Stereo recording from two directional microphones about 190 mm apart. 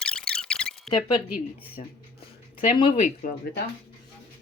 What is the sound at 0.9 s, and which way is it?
Speech, 25° left (ahead or behind).